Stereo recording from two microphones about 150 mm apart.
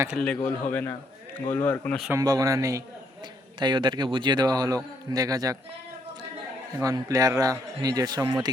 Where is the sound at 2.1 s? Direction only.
25° right (ahead or behind).